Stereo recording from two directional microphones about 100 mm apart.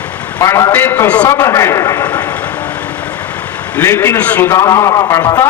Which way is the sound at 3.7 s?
20° left (ahead or behind).